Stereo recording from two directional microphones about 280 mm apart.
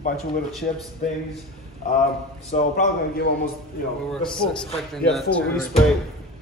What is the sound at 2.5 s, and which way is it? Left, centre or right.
A man's voice, left.